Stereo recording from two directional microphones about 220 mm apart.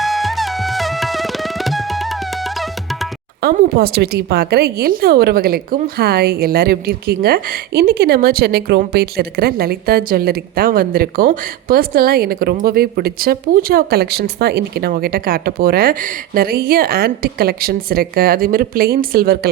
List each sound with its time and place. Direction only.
0.0 s tabla: centre (ahead or behind)
3.4 s a woman's voice: 45° right (ahead or behind)